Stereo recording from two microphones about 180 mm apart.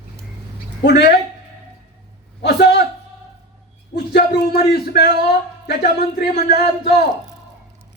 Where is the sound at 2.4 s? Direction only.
70° left (ahead or behind).